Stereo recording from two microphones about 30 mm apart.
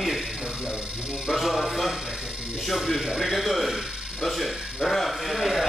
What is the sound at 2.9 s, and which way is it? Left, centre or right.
Speech, right.